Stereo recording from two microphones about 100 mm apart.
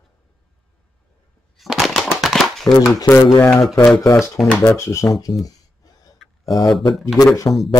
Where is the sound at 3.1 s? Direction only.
60° left (ahead or behind).